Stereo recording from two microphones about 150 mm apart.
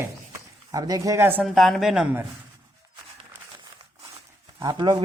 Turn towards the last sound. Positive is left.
turn(degrees=-30)  # may be behind; listen again after turning